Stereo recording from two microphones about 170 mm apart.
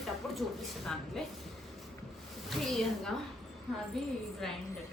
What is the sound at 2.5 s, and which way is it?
A woman's voice, centre (ahead or behind).